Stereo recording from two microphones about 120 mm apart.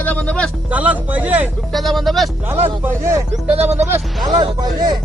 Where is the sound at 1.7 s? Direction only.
Centre (ahead or behind).